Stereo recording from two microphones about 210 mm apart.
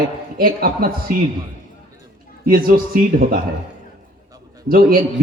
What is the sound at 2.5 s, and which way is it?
Speech, 45° right (ahead or behind).